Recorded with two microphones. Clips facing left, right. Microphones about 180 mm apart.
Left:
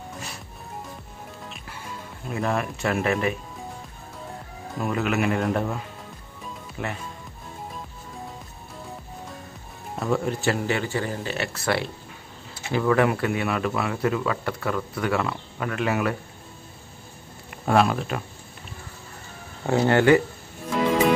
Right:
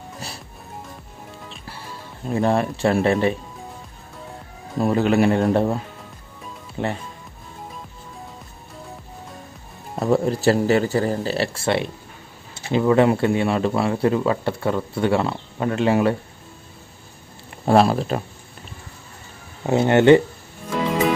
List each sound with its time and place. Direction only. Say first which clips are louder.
1.5 s music: right 1 dB; 35° right (ahead or behind)
4.7 s speech: right 7 dB; 30° right (ahead or behind)
6.8 s speech: right 7 dB; 30° right (ahead or behind)
9.9 s speech: right 6 dB; 35° right (ahead or behind)
17.5 s speech: right 4 dB; 30° right (ahead or behind)
19.6 s speech: right 4 dB; 20° right (ahead or behind)